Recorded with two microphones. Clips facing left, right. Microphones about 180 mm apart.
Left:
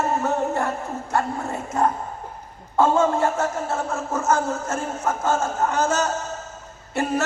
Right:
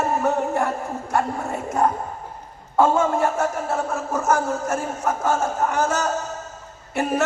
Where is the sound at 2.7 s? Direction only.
25° left (ahead or behind).